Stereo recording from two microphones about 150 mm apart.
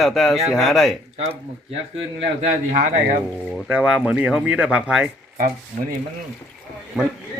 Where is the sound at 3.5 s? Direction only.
5° right (ahead or behind).